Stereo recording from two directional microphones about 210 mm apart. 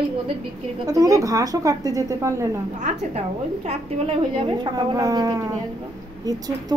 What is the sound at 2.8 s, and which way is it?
A woman's voice, 30° right (ahead or behind).